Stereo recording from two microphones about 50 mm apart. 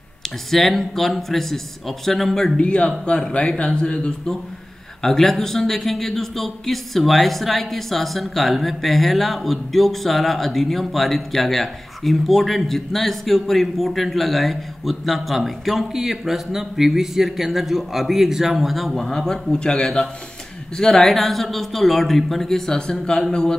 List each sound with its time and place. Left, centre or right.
0.2 s speech: centre
2.5 s speech: left
5.0 s speech: centre